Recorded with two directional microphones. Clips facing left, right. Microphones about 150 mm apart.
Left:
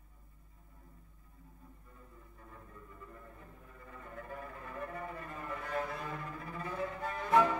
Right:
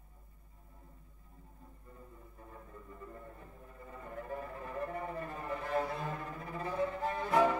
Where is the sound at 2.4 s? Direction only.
30° right (ahead or behind).